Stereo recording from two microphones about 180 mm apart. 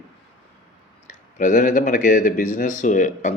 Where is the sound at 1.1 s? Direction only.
45° left (ahead or behind).